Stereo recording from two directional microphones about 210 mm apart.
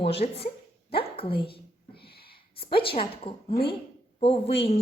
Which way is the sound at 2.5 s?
25° left (ahead or behind).